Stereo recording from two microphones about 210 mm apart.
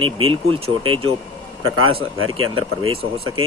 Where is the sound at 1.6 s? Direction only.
75° right (ahead or behind).